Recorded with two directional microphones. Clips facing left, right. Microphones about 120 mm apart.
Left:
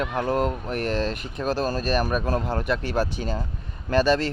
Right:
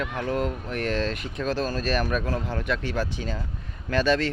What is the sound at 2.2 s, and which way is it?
Speech, 45° left (ahead or behind).